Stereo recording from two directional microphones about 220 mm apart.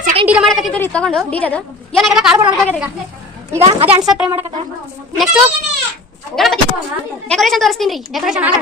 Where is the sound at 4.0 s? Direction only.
Centre (ahead or behind).